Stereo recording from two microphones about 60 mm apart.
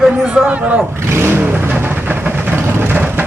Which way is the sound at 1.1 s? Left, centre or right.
Right.